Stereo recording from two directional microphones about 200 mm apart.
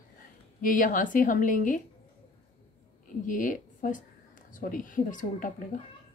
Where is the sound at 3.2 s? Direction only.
40° left (ahead or behind).